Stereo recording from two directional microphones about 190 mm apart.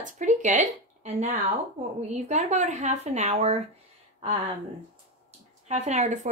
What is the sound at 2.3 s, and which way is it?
Speech, 40° right (ahead or behind).